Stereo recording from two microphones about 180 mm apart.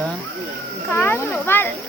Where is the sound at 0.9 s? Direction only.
10° left (ahead or behind).